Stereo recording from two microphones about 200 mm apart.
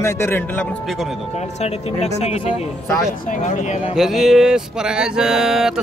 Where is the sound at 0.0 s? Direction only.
10° left (ahead or behind).